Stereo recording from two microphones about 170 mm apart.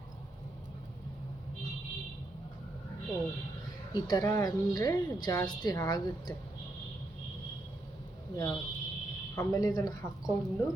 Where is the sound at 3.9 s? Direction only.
20° left (ahead or behind).